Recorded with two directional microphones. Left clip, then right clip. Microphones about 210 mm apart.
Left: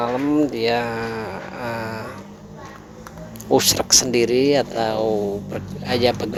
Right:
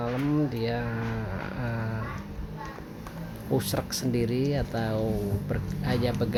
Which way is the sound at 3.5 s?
35° left (ahead or behind).